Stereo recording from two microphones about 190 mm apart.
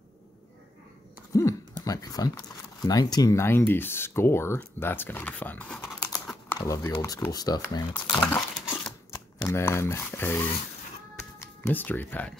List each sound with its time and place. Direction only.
1.3 s speech: 15° left (ahead or behind)
8.5 s crumpling: 5° left (ahead or behind)
9.4 s speech: 15° left (ahead or behind)
11.1 s music: 10° left (ahead or behind)